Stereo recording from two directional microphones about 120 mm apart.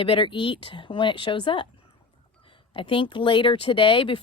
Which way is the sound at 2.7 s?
45° left (ahead or behind).